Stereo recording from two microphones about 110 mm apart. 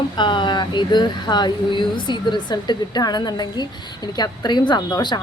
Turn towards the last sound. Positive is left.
turn(degrees=35)  # may be behind; listen again after turning